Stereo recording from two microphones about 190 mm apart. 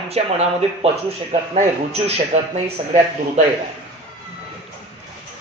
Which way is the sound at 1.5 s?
35° right (ahead or behind).